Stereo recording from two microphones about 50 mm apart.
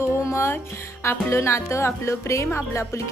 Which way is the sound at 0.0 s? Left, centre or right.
Left.